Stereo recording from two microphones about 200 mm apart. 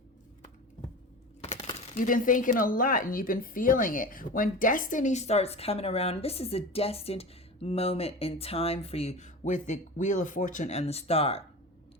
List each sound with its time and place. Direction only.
1.4 s speech: 30° left (ahead or behind)